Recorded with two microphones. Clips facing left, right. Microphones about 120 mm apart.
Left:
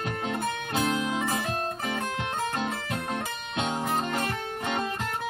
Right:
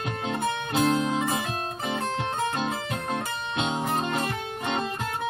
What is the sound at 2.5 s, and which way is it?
Music, 20° right (ahead or behind).